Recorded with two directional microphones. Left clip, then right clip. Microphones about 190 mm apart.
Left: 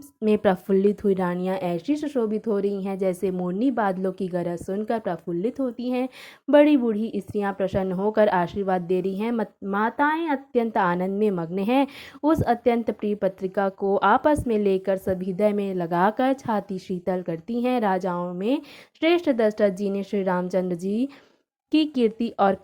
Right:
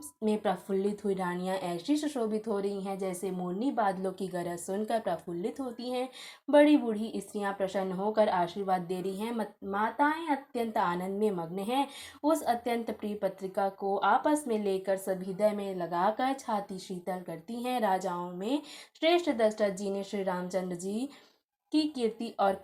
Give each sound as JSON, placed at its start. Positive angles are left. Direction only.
{"t": 0.3, "sound": "a woman's voice", "side_deg": 45}